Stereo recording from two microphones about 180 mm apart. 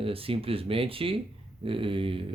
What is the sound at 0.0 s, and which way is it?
Speech, 30° right (ahead or behind).